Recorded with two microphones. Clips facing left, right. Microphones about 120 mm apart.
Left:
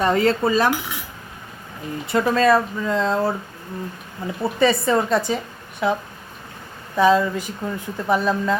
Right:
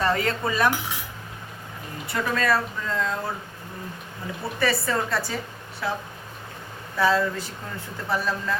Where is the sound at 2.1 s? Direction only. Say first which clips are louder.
Left 7 dB; 30° left (ahead or behind).